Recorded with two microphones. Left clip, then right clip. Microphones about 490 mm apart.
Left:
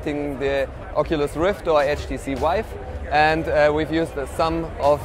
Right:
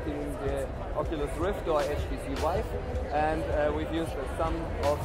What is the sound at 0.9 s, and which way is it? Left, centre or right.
Speech, left.